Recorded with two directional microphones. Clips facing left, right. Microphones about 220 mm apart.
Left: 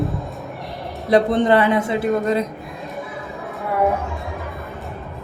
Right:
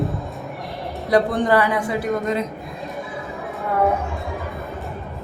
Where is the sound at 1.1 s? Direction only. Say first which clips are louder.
Left 2 dB; 25° left (ahead or behind).